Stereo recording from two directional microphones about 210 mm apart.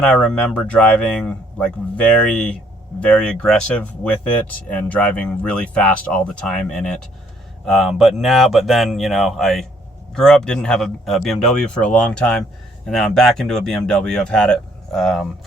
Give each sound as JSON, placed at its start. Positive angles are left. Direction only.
{"t": 0.0, "sound": "speech", "side_deg": 5}